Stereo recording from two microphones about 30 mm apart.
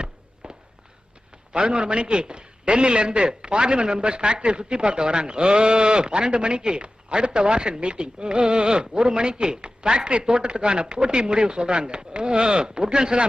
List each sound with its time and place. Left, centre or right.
0.4 s walk: right
1.5 s a man's voice: right